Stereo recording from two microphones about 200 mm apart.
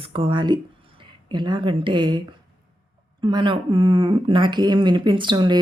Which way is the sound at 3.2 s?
25° right (ahead or behind).